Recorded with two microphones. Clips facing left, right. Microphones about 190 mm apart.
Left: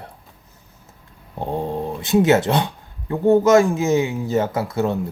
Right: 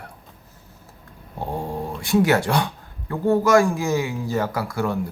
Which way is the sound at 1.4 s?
20° left (ahead or behind).